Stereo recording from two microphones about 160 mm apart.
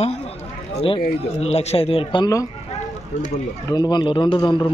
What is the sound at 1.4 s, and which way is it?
Speech, 40° left (ahead or behind).